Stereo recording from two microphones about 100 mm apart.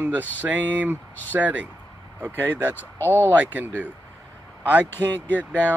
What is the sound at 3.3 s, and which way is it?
Speech, 15° right (ahead or behind).